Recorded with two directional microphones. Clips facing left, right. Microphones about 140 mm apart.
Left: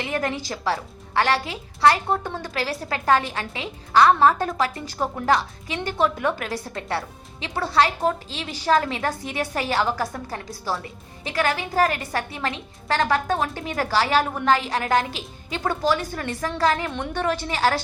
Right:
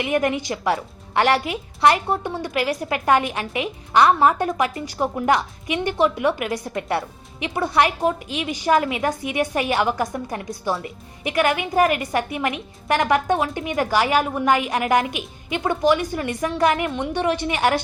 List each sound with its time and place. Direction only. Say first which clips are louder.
0.0 s a woman's voice: right 5 dB; 15° right (ahead or behind)